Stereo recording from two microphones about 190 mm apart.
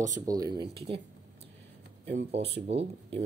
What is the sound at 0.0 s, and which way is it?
Speech, 20° right (ahead or behind).